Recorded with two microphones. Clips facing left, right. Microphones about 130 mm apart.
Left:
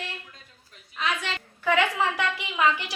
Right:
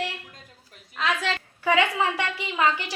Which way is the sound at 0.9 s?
90° right.